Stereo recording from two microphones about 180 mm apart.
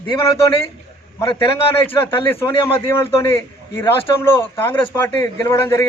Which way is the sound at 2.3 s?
15° left (ahead or behind).